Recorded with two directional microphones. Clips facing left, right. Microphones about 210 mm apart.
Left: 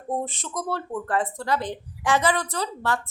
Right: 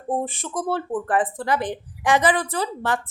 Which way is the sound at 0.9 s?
15° right (ahead or behind).